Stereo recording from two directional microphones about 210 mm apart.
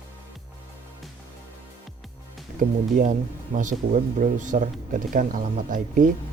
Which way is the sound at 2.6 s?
40° right (ahead or behind).